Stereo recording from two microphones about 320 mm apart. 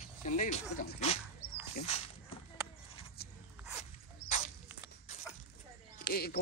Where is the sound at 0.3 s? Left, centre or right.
Left.